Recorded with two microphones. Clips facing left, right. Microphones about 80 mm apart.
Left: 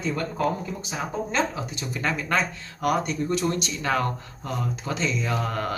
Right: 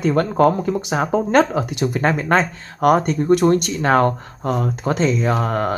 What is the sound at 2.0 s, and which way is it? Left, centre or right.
Speech, right.